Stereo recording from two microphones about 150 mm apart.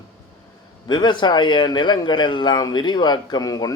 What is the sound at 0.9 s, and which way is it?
A man's voice, 30° left (ahead or behind).